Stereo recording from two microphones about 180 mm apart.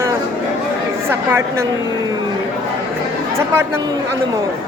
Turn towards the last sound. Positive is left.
turn(degrees=-15)  # may be behind; listen again after turning